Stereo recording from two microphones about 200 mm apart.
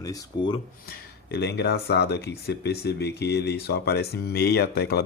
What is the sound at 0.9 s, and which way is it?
Speech, 55° left (ahead or behind).